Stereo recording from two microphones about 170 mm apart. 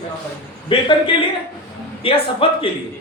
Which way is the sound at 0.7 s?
30° left (ahead or behind).